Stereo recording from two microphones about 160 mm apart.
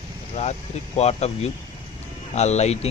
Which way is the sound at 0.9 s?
40° left (ahead or behind).